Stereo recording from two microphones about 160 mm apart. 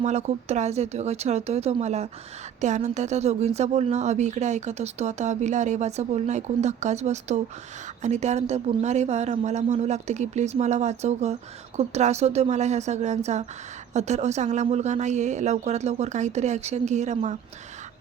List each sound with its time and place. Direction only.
0.0 s speech: 45° right (ahead or behind)